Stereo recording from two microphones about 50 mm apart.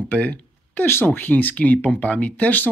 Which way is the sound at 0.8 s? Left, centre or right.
Left.